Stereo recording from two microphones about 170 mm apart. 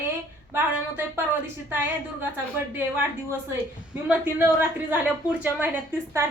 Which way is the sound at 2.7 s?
10° right (ahead or behind).